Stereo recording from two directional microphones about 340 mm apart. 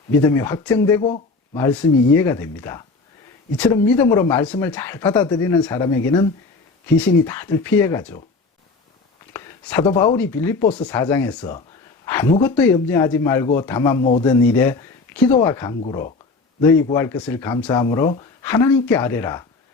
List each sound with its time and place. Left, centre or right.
0.2 s speech: centre
9.3 s a sound: centre
10.0 s speech: centre